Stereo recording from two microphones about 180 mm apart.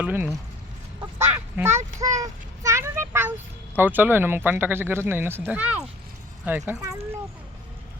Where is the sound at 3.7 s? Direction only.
10° right (ahead or behind).